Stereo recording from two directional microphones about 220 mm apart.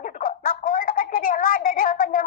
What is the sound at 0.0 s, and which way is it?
Music, 40° left (ahead or behind).